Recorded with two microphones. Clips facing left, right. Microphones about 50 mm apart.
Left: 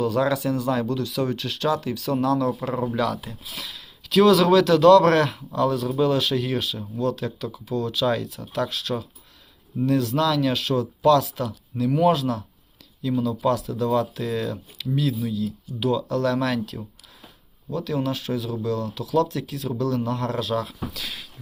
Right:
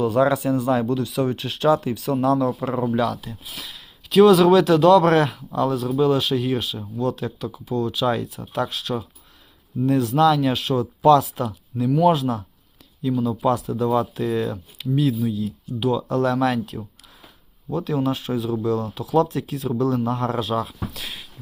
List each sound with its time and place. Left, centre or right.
0.0 s speech: centre
3.0 s speech: centre
13.1 s speech: centre
13.4 s speech: centre
15.8 s speech: centre
17.7 s speech: centre